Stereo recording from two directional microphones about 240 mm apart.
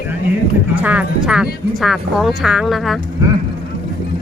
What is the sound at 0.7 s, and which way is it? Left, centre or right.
Speech, centre.